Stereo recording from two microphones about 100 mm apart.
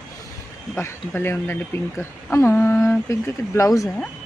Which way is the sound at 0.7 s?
25° left (ahead or behind).